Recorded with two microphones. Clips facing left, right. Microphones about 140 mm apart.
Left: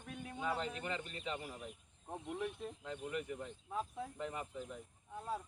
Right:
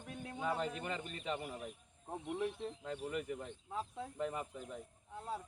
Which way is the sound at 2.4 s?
30° right (ahead or behind).